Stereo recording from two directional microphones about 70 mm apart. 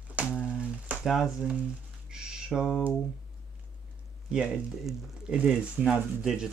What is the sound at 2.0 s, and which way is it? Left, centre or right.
Bird, centre.